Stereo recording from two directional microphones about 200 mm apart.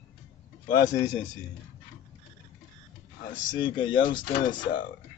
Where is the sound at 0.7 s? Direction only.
20° left (ahead or behind).